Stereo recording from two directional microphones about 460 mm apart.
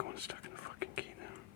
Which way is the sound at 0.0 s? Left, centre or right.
Right.